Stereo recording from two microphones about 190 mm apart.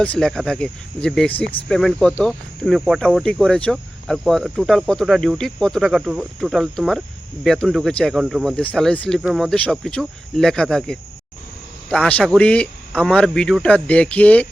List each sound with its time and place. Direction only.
0.0 s speech: 5° left (ahead or behind)